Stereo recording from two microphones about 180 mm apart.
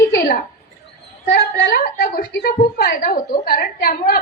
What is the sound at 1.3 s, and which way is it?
A woman's voice, 70° left (ahead or behind).